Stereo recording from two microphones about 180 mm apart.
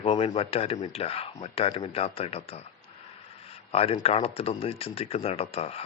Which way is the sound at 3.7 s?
35° left (ahead or behind).